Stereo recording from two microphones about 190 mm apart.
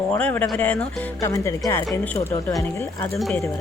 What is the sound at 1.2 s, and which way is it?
Speech, 15° left (ahead or behind).